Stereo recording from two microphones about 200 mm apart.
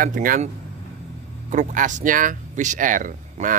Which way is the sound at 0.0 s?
45° right (ahead or behind).